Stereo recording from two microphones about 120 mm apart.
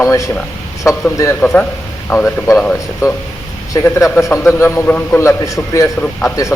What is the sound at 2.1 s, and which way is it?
A man's voice, 25° left (ahead or behind).